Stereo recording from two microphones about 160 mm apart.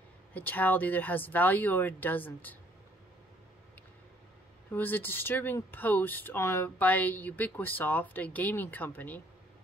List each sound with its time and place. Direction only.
0.3 s speech: 10° left (ahead or behind)
4.7 s speech: 10° left (ahead or behind)